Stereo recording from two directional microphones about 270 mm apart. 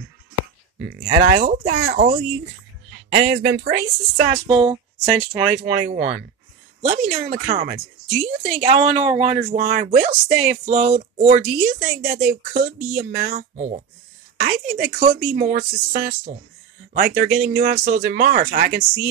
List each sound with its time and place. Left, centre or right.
0.7 s speech: right
4.5 s speech: right